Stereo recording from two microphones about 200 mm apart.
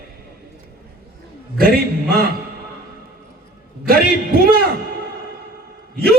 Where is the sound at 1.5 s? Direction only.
50° right (ahead or behind).